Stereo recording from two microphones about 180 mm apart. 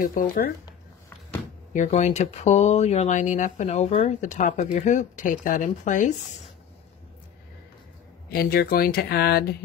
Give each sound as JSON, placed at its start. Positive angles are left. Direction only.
{"t": 0.0, "sound": "speech", "side_deg": 50}
{"t": 1.7, "sound": "speech", "side_deg": 40}
{"t": 8.3, "sound": "speech", "side_deg": 55}